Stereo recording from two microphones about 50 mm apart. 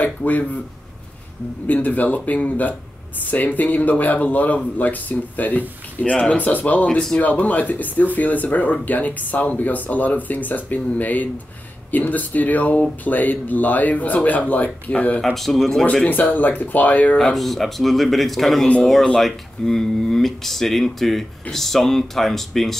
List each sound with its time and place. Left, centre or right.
0.0 s a man's voice: left
1.7 s a man's voice: left
6.9 s speech: centre
7.2 s a man's voice: left
15.2 s speech: centre
15.8 s a man's voice: left
16.1 s a man's voice: left
17.2 s speech: centre